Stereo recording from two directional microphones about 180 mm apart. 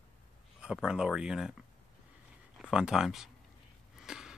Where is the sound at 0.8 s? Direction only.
5° right (ahead or behind).